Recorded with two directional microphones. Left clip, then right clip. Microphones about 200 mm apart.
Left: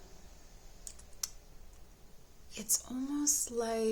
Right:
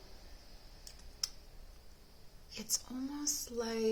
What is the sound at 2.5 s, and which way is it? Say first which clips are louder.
A woman's voice: left 3 dB; 35° left (ahead or behind).